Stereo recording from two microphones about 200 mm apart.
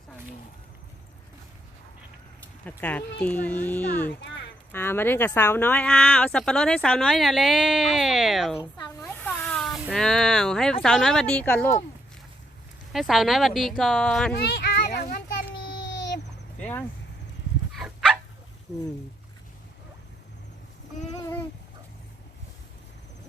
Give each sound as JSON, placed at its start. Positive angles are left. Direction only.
{"t": 2.6, "sound": "speech", "side_deg": 10}
{"t": 8.8, "sound": "a sound", "side_deg": 10}
{"t": 10.8, "sound": "speech", "side_deg": 0}
{"t": 12.9, "sound": "speech", "side_deg": 0}
{"t": 14.4, "sound": "children playing", "side_deg": 55}
{"t": 17.7, "sound": "dog", "side_deg": -5}